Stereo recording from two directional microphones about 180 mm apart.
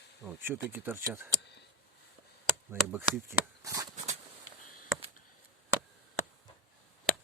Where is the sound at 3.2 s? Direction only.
20° right (ahead or behind).